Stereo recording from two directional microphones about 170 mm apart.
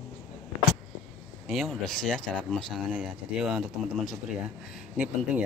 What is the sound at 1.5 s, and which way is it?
Speech, centre (ahead or behind).